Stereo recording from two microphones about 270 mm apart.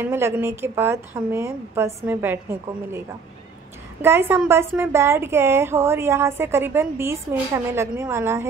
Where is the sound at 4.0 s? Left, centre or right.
Centre.